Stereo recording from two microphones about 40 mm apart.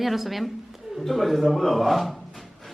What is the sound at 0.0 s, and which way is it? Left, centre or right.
A man's voice, centre.